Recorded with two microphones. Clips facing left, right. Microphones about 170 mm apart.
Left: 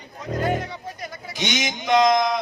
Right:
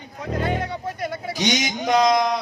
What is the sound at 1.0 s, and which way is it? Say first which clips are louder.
Speech: right 8 dB; 60° right (ahead or behind).